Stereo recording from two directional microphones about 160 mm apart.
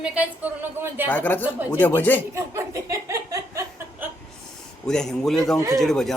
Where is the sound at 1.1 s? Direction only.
10° left (ahead or behind).